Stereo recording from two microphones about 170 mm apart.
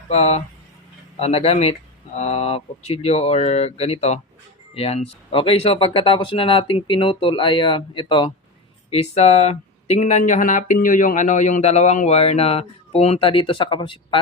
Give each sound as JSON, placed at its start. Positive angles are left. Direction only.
{"t": 0.1, "sound": "speech", "side_deg": 40}